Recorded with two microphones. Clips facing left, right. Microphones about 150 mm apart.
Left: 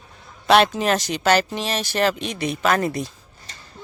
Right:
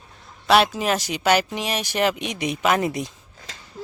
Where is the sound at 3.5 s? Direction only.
90° right.